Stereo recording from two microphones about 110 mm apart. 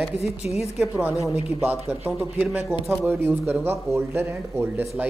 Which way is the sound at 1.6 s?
15° right (ahead or behind).